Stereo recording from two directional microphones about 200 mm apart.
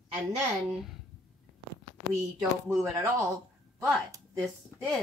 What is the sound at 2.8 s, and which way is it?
Speech, 15° right (ahead or behind).